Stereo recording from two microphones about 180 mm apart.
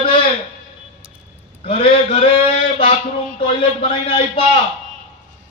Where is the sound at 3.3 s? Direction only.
30° left (ahead or behind).